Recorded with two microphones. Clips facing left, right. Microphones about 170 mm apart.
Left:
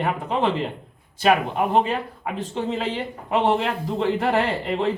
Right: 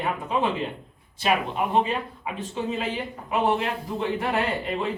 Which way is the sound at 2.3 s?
70° left (ahead or behind).